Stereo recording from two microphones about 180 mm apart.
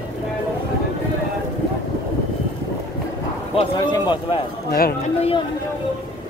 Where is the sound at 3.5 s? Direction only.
25° left (ahead or behind).